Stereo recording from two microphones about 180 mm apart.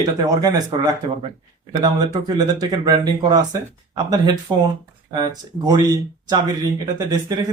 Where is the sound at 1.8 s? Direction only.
20° right (ahead or behind).